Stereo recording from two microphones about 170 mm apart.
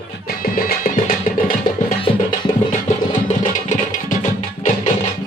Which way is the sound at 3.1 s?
45° left (ahead or behind).